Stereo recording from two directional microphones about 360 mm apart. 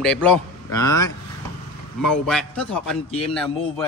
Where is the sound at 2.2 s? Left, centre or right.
Centre.